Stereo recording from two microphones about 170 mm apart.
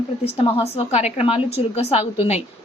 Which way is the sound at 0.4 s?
35° left (ahead or behind).